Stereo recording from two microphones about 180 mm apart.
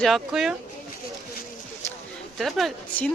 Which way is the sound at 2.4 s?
Centre (ahead or behind).